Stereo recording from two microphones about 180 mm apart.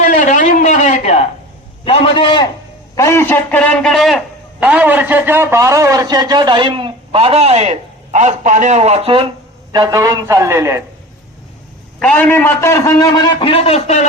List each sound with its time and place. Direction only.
0.0 s a sound: 50° left (ahead or behind)
1.8 s a man's voice: 30° left (ahead or behind)
2.9 s a man's voice: 15° left (ahead or behind); by 10.8 s 15° right (ahead or behind)
11.9 s a man's voice: 5° left (ahead or behind); by 14.1 s 40° left (ahead or behind)